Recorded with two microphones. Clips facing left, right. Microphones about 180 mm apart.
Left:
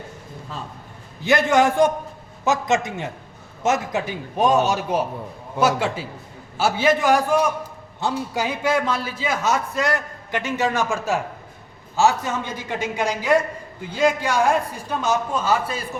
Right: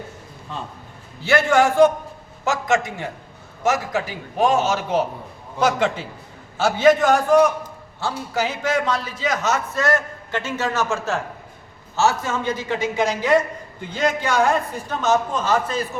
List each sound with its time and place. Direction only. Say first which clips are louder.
1.2 s a man's voice: even; 15° left (ahead or behind)